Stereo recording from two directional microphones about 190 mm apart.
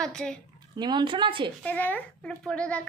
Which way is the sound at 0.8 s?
25° right (ahead or behind).